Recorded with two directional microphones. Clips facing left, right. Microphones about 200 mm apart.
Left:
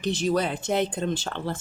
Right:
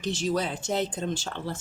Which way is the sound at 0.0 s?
55° left (ahead or behind).